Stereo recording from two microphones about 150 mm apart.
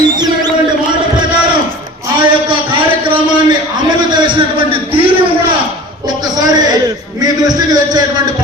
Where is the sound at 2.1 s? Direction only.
35° right (ahead or behind).